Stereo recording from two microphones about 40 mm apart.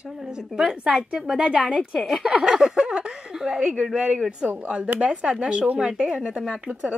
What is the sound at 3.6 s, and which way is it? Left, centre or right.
Speech, right.